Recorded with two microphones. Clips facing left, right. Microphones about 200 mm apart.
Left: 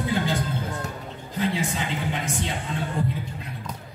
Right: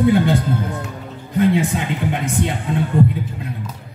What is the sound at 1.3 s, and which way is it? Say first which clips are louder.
Speech: right 10 dB; 60° right (ahead or behind).